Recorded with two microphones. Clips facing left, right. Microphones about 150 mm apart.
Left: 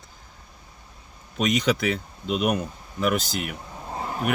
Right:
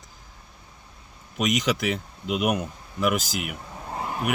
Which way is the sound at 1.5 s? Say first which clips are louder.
Left 2 dB; 5° right (ahead or behind).